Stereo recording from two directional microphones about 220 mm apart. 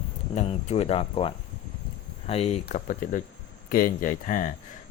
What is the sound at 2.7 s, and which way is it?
Speech, 40° left (ahead or behind).